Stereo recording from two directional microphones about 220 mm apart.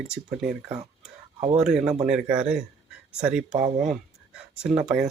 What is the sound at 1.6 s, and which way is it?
Speech, 5° right (ahead or behind).